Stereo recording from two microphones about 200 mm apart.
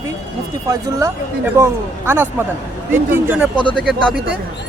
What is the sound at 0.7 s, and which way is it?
A man's voice, 15° right (ahead or behind).